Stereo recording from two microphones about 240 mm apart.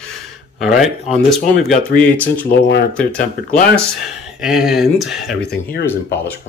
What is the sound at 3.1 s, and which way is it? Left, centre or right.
Speech, left.